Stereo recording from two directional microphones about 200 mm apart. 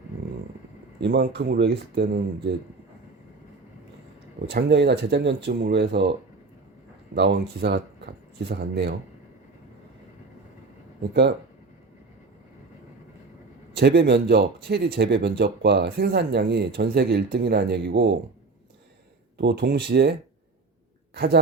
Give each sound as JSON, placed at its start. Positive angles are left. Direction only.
{"t": 0.9, "sound": "speech", "side_deg": -60}
{"t": 4.4, "sound": "speech", "side_deg": -55}
{"t": 7.2, "sound": "speech", "side_deg": -60}
{"t": 11.1, "sound": "speech", "side_deg": -55}
{"t": 13.7, "sound": "speech", "side_deg": -55}
{"t": 19.4, "sound": "speech", "side_deg": -55}
{"t": 21.2, "sound": "speech", "side_deg": -55}